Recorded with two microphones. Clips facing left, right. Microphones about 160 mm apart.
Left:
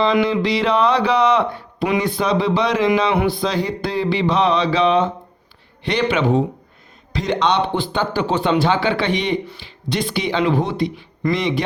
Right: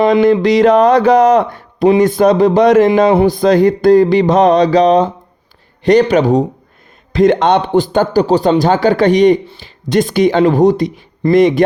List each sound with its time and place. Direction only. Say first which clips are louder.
0.0 s a man's voice: right 8 dB; 45° right (ahead or behind)